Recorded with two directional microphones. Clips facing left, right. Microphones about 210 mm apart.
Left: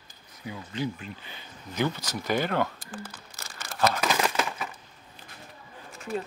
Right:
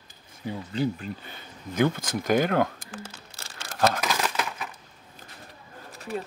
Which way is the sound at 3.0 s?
30° right (ahead or behind).